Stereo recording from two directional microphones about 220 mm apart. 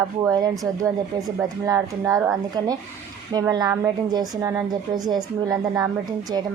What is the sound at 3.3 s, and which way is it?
A woman's voice, 15° right (ahead or behind).